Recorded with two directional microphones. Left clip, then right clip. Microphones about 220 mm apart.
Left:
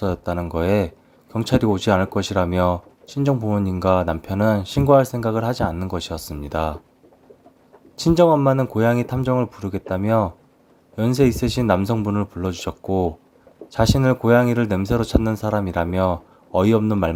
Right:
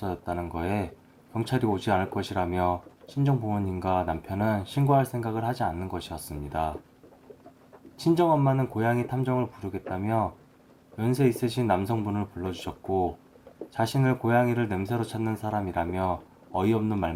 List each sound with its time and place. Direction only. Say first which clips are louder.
0.0 s speech: left 8 dB; 45° left (ahead or behind)
7.9 s speech: left 8 dB; 45° left (ahead or behind)